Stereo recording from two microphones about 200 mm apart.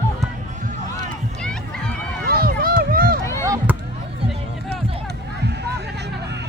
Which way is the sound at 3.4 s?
15° right (ahead or behind).